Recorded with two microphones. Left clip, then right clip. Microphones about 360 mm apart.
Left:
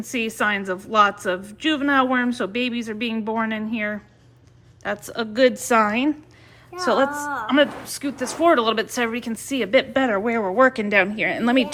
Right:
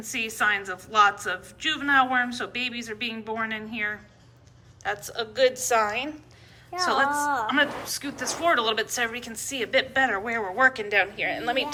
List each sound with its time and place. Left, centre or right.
0.0 s a woman's voice: centre